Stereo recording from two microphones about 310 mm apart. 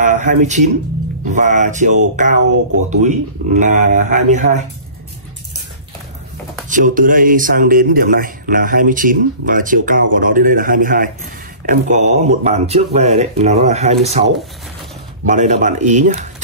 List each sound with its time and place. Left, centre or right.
0.0 s speech: right
6.7 s speech: right
15.2 s speech: right